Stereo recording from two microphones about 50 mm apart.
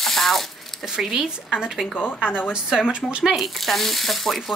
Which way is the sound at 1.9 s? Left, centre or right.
Left.